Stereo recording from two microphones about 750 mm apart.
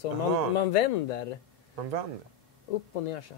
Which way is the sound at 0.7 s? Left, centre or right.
Left.